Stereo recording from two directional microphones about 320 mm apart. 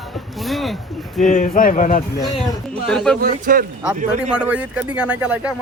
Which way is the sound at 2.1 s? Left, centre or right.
Centre.